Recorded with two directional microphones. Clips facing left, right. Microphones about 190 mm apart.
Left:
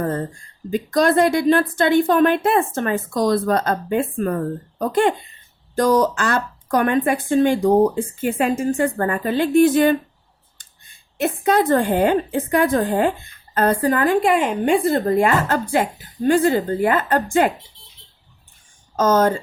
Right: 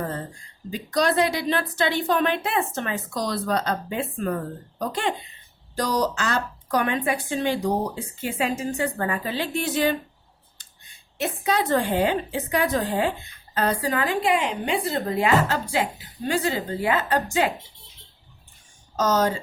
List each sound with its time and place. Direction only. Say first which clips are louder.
0.7 s a woman's voice: left 6 dB; 50° left (ahead or behind)
11.2 s a woman's voice: left 6 dB; 50° left (ahead or behind)
18.9 s a woman's voice: left 5 dB; 50° left (ahead or behind)